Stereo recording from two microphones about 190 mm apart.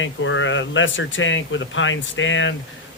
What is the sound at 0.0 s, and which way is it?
Speech, 90° left.